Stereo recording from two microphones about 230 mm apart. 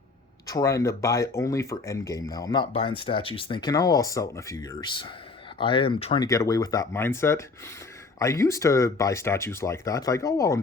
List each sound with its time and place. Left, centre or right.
0.4 s speech: centre